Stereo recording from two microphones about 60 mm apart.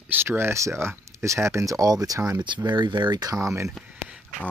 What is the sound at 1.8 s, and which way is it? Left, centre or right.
Speech, right.